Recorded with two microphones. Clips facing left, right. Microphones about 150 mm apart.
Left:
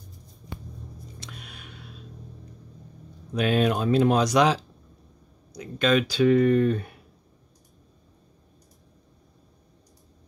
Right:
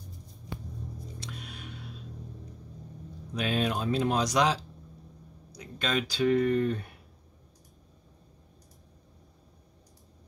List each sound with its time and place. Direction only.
1.2 s music: 65° left (ahead or behind)
3.3 s speech: 60° left (ahead or behind)
5.6 s speech: 75° left (ahead or behind)